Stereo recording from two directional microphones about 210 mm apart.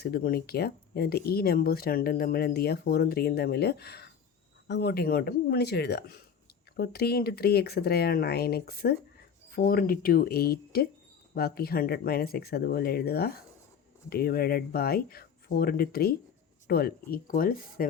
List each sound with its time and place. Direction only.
0.0 s speech: 45° left (ahead or behind)